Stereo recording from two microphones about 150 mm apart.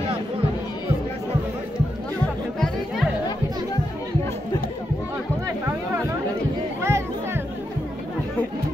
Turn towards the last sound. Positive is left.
turn(degrees=-15)  # may be behind; listen again after turning